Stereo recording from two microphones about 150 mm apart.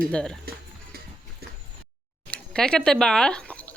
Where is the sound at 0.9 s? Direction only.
90° right.